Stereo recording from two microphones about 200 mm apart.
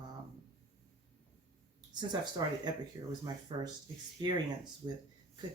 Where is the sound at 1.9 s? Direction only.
20° right (ahead or behind).